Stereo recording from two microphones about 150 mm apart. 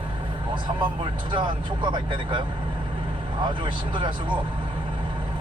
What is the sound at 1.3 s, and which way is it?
A man's voice, 30° right (ahead or behind).